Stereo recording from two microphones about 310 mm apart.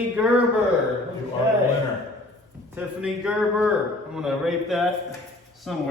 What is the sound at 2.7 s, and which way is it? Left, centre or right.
A man's voice, centre.